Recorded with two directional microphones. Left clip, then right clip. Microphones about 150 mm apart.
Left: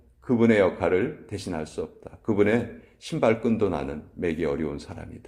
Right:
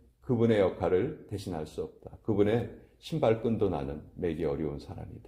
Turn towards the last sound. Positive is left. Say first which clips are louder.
# left 4 dB
turn(degrees=-15)  # may be behind; listen again after turning